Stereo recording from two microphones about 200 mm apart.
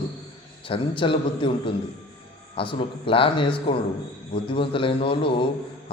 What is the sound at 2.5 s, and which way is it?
Speech, 25° left (ahead or behind).